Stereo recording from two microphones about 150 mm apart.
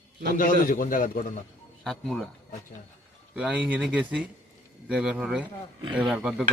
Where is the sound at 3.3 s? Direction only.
10° right (ahead or behind).